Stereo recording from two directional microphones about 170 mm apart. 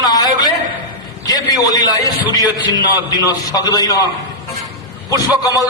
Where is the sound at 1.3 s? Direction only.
20° left (ahead or behind).